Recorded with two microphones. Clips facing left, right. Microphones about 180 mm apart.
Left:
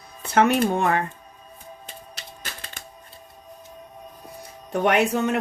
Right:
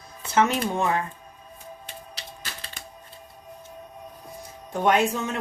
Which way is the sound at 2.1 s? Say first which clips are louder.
Even; 50° left (ahead or behind).